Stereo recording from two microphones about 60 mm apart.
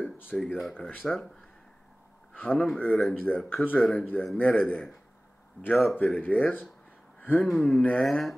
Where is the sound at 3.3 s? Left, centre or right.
Left.